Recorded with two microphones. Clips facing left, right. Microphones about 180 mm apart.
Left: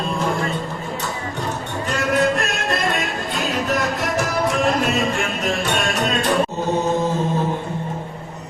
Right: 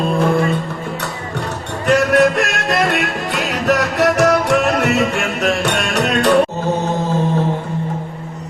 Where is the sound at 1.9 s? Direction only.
75° right (ahead or behind).